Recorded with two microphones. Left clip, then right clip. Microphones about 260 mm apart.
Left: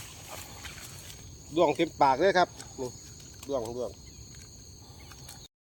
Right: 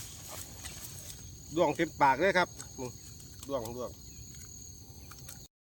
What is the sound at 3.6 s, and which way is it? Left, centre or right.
Cricket, right.